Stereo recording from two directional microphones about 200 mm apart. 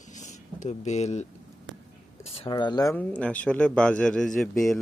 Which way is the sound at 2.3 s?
30° left (ahead or behind).